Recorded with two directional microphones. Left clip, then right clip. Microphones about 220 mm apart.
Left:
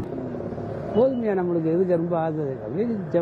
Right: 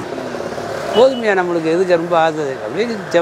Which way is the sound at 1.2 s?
15° right (ahead or behind).